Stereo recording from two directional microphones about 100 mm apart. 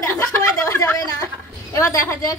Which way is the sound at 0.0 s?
25° left (ahead or behind).